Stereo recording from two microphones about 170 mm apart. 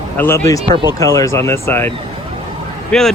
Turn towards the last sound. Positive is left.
turn(degrees=0)  # may be behind; listen again after turning